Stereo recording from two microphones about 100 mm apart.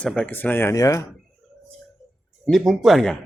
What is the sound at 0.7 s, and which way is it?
Speech, 30° left (ahead or behind).